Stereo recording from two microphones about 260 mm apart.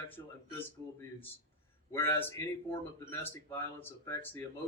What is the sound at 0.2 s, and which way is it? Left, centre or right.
Speech, centre.